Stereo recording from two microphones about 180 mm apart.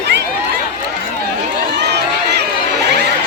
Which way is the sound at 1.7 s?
70° right (ahead or behind).